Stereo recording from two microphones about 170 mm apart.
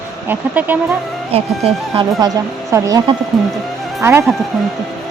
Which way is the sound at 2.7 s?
20° right (ahead or behind).